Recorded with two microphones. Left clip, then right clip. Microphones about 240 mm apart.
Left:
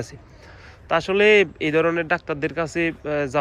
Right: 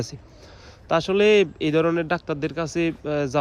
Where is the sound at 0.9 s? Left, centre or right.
Centre.